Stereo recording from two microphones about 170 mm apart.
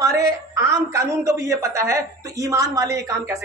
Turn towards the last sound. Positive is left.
turn(degrees=-20)  # may be behind; listen again after turning